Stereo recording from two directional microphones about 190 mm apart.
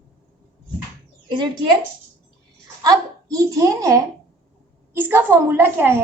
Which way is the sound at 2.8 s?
20° right (ahead or behind).